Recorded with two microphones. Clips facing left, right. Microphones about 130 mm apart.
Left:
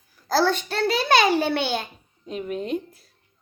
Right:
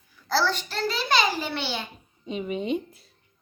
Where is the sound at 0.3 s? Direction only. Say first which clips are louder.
Left 4 dB; 50° left (ahead or behind).